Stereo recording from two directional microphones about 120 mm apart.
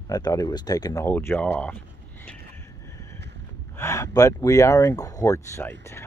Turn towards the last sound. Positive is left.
turn(degrees=20)  # may be behind; listen again after turning